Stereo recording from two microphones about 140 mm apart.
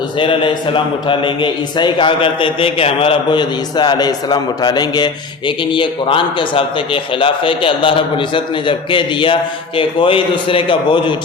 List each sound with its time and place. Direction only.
0.2 s a man's voice: 40° left (ahead or behind)